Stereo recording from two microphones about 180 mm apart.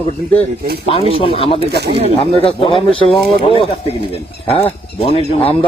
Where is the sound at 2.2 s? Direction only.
30° left (ahead or behind).